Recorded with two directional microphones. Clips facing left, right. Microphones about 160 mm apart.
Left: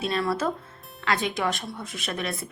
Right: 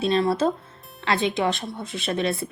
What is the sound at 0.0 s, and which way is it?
A woman's voice, 25° right (ahead or behind).